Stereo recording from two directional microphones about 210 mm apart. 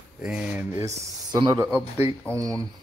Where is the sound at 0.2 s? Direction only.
5° right (ahead or behind).